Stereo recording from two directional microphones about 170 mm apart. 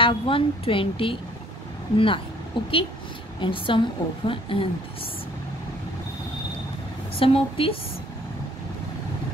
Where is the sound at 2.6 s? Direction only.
30° left (ahead or behind).